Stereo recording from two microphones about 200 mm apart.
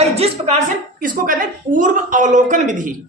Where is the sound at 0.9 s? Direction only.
45° right (ahead or behind).